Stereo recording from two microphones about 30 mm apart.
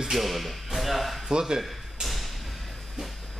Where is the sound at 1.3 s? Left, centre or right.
Right.